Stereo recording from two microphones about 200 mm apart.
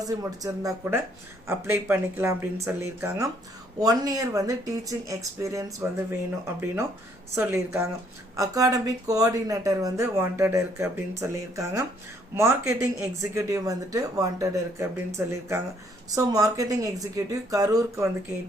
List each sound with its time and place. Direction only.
0.0 s speech: 15° right (ahead or behind)
7.3 s speech: 10° right (ahead or behind)